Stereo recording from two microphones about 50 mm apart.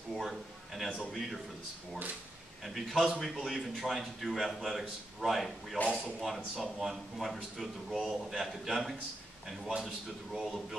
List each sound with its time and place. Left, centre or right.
0.1 s a man's voice: centre
2.6 s a man's voice: centre
10.4 s a man's voice: centre